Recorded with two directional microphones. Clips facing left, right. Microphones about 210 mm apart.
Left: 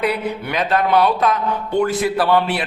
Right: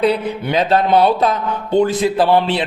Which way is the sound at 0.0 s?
25° right (ahead or behind).